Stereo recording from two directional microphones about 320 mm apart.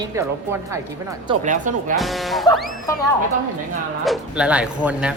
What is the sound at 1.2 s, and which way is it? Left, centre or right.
Speech, right.